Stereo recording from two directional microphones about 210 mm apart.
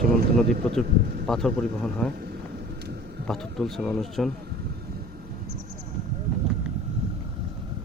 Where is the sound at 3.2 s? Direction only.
Centre (ahead or behind).